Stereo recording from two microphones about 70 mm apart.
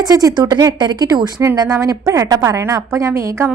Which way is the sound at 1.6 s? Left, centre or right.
Right.